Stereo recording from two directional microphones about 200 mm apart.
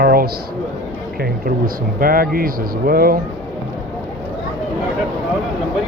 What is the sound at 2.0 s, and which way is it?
Speech, 45° right (ahead or behind).